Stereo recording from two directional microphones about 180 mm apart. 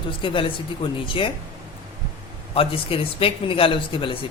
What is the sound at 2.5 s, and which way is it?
Speech, 30° left (ahead or behind).